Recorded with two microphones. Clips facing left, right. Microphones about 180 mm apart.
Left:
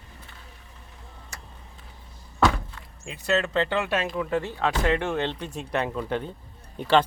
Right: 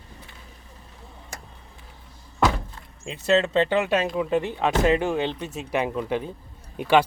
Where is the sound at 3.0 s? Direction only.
25° right (ahead or behind).